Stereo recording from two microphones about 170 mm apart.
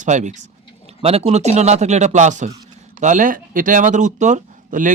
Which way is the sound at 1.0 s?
35° right (ahead or behind).